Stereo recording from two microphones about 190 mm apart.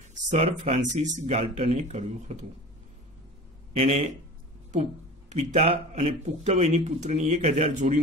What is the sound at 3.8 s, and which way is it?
A man's voice, 35° right (ahead or behind).